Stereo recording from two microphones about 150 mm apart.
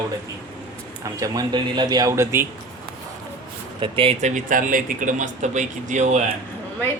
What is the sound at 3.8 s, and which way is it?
Speech, 35° right (ahead or behind).